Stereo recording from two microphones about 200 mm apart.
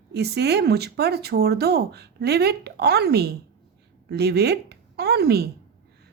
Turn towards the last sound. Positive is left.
turn(degrees=-55)  # may be behind; listen again after turning